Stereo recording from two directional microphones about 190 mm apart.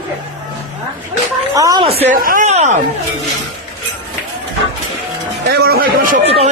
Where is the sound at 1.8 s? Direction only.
30° right (ahead or behind).